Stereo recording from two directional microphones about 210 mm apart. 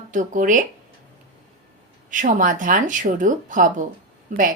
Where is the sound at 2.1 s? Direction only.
40° right (ahead or behind).